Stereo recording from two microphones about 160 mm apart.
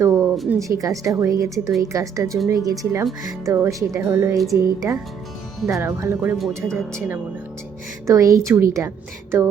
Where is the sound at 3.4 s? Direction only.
15° right (ahead or behind).